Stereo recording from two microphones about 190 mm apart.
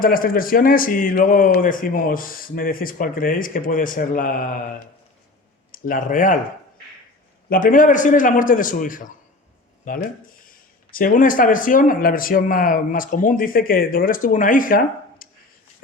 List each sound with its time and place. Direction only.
0.0 s speech: 50° left (ahead or behind)
5.7 s speech: 45° left (ahead or behind)
7.5 s speech: 45° left (ahead or behind)